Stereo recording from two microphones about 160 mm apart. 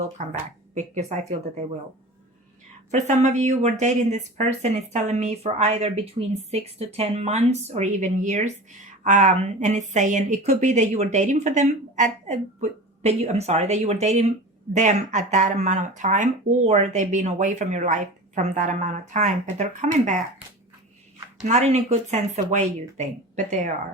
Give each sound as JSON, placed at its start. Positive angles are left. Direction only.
{"t": 0.2, "sound": "speech", "side_deg": -50}
{"t": 2.9, "sound": "speech", "side_deg": -50}
{"t": 21.4, "sound": "speech", "side_deg": -45}